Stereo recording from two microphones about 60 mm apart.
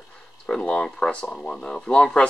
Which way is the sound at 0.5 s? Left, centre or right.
Centre.